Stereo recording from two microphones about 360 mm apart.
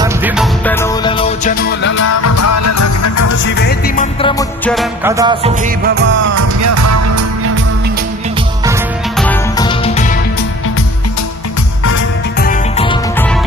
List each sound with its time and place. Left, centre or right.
0.0 s music: centre
1.8 s music: left
3.4 s music: left; by 6.1 s right
6.2 s music: right
9.1 s music: centre
12.4 s music: centre